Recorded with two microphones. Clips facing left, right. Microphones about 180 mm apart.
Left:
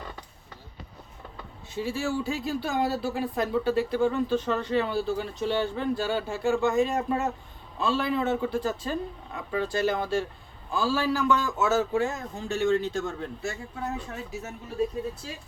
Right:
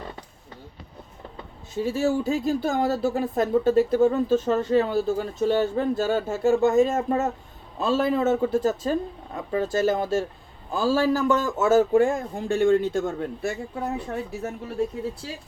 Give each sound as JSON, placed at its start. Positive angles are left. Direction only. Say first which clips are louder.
{"t": 1.7, "sound": "speech", "louder": "right 6 dB", "side_deg": -45}